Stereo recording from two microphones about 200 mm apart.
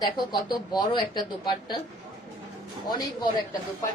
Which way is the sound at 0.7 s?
20° left (ahead or behind).